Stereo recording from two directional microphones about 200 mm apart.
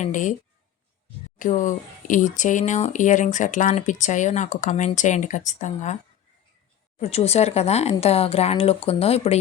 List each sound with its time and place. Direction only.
0.0 s speech: 40° left (ahead or behind)
1.4 s speech: 40° left (ahead or behind)
7.0 s speech: 30° left (ahead or behind)